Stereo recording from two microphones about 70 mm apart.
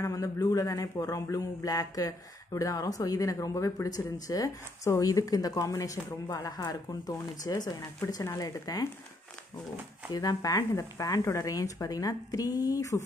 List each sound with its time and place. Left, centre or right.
0.0 s speech: left
10.1 s speech: left
10.7 s speech: left